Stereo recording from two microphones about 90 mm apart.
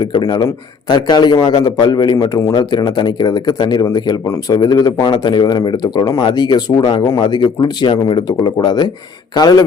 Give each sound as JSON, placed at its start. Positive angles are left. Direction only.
{"t": 0.2, "sound": "speech", "side_deg": 50}